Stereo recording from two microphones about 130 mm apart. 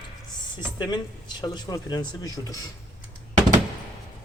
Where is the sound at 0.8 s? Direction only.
35° left (ahead or behind).